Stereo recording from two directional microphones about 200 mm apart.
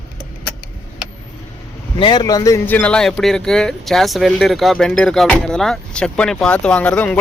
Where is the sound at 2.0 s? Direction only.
20° left (ahead or behind).